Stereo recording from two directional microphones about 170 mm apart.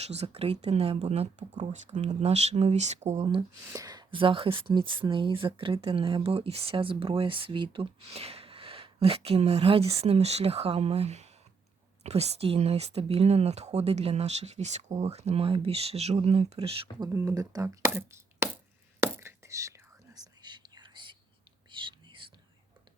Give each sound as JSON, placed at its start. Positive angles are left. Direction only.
{"t": 0.0, "sound": "speech", "side_deg": -40}
{"t": 3.7, "sound": "speech", "side_deg": -20}
{"t": 17.1, "sound": "speech", "side_deg": -20}
{"t": 19.0, "sound": "whispering", "side_deg": -15}